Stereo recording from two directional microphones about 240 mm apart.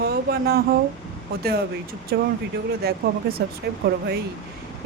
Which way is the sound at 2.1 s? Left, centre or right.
Right.